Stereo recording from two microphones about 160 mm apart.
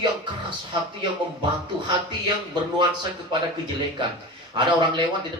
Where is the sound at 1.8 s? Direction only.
30° right (ahead or behind).